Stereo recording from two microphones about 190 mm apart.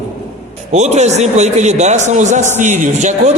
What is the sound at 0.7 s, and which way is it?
A man's voice, 35° right (ahead or behind).